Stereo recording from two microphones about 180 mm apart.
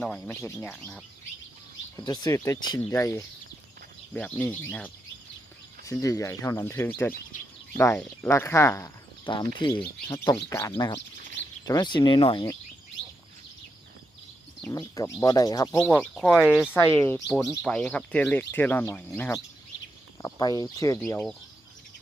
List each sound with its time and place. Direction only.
0.0 s speech: 5° left (ahead or behind)
2.0 s speech: 20° left (ahead or behind)
9.2 s speech: 25° left (ahead or behind)
10.1 s speech: 15° left (ahead or behind)
14.7 s speech: 20° left (ahead or behind)
15.9 s speech: 5° left (ahead or behind)
16.7 s speech: 10° left (ahead or behind)